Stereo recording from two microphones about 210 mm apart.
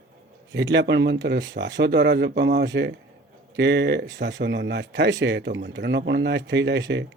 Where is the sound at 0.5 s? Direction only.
55° right (ahead or behind).